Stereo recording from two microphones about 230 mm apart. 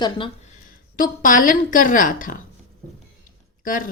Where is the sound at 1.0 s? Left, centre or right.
Left.